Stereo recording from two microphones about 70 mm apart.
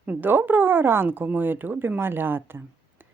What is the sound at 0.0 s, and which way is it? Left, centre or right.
Speech, right.